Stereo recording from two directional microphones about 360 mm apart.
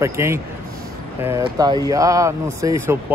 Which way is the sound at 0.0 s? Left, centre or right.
Centre.